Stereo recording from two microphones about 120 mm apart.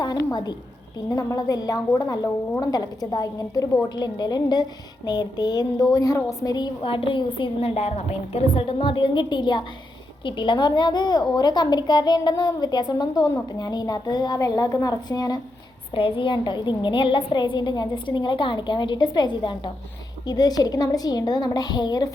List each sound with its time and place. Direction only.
0.0 s a sound: 35° left (ahead or behind)
1.1 s a woman's voice: 30° left (ahead or behind)
6.8 s a woman's voice: 50° left (ahead or behind); by 15.4 s 30° left (ahead or behind)
16.0 s a woman's voice: 45° left (ahead or behind)